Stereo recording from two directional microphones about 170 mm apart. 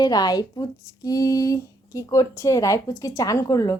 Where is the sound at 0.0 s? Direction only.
20° left (ahead or behind).